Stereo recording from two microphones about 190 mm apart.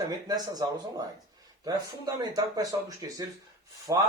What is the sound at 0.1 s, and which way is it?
Speech, 20° right (ahead or behind).